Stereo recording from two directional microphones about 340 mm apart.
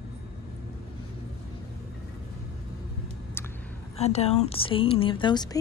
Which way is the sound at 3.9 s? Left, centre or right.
Centre.